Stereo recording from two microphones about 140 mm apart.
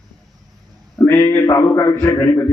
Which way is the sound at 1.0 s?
15° left (ahead or behind).